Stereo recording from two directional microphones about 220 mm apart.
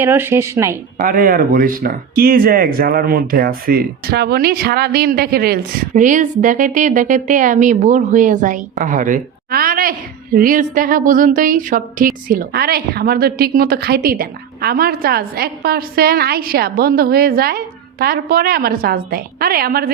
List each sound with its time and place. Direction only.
0.0 s speech: 10° right (ahead or behind)
0.9 s speech: 40° right (ahead or behind)